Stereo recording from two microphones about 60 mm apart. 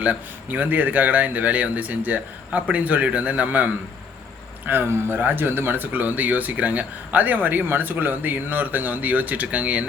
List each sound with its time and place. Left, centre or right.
0.0 s speech: right